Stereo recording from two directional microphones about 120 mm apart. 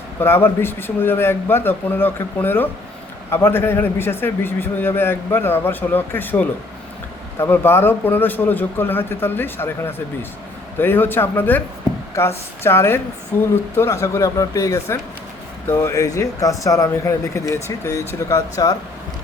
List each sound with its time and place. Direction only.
0.2 s a man's voice: 20° left (ahead or behind)